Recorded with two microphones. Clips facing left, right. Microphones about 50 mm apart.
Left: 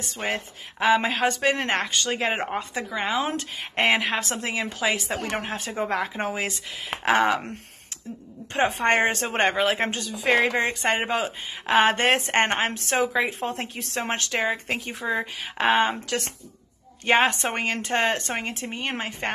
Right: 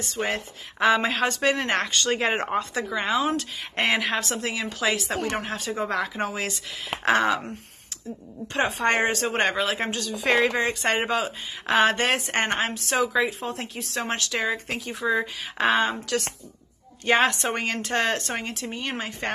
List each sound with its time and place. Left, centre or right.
0.1 s speech: left
0.7 s a woman's voice: centre
1.4 s a woman's voice: centre
1.8 s speech: centre
2.7 s a woman's voice: centre
3.2 s a woman's voice: left
8.8 s speech: left
10.3 s a woman's voice: centre; by 12.8 s left
12.9 s a woman's voice: centre
13.3 s speech: left
13.9 s a woman's voice: left
15.0 s speech: left
15.7 s a woman's voice: left
17.0 s speech: left